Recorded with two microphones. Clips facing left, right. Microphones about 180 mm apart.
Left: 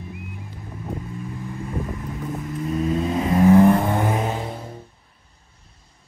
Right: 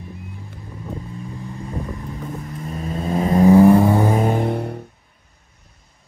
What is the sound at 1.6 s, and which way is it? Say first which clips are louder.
Vehicle: even; 35° right (ahead or behind).